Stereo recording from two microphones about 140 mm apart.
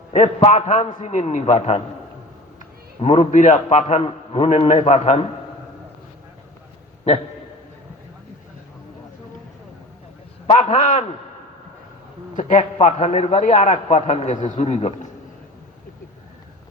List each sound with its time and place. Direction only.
0.1 s a man's voice: 55° left (ahead or behind)
3.0 s a man's voice: 55° left (ahead or behind)
10.4 s a man's voice: 55° left (ahead or behind)
12.4 s a man's voice: 60° left (ahead or behind)
13.8 s a man's voice: 50° left (ahead or behind)